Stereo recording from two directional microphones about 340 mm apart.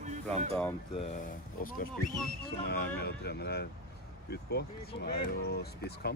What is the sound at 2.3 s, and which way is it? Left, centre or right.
Speech, left.